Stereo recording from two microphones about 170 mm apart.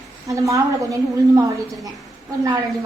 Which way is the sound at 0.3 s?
20° right (ahead or behind).